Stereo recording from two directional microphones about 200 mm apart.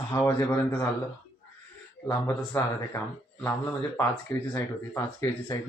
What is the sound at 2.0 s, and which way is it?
Speech, 15° left (ahead or behind).